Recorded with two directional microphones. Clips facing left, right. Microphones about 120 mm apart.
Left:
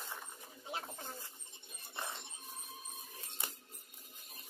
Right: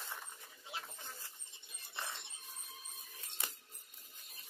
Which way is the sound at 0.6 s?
40° left (ahead or behind).